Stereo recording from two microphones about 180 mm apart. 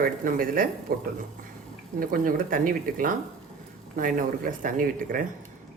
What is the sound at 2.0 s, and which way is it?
Speech, 50° right (ahead or behind).